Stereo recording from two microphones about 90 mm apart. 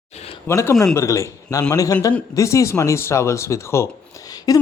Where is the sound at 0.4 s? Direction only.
30° left (ahead or behind).